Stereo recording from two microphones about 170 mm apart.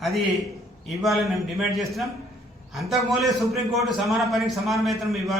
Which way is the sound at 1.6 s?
Centre (ahead or behind).